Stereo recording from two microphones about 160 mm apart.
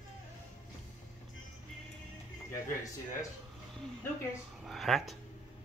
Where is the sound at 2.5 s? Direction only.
20° left (ahead or behind).